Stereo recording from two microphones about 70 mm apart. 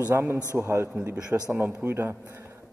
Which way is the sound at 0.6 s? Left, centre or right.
Right.